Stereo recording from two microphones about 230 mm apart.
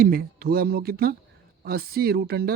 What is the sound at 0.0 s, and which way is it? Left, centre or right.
Speech, right.